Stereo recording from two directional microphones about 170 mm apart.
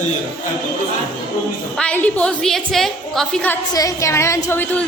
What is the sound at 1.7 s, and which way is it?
A woman's voice, 5° left (ahead or behind).